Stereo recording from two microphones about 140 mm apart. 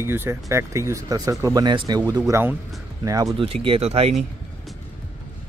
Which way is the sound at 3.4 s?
40° right (ahead or behind).